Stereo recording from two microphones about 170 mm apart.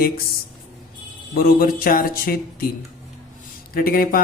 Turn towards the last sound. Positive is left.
turn(degrees=60)  # may be behind; listen again after turning